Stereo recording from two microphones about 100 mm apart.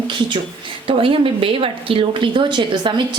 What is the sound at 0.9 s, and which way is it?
Speech, 65° right (ahead or behind).